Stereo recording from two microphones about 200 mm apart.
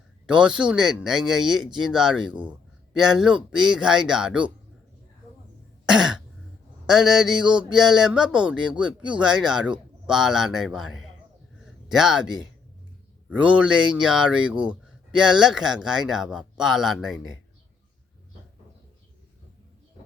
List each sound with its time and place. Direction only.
0.3 s speech: 5° right (ahead or behind)
5.8 s cough: 5° right (ahead or behind)
6.8 s speech: centre (ahead or behind)